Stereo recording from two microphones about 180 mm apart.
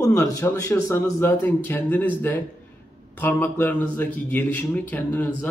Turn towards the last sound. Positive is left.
turn(degrees=10)  # may be behind; listen again after turning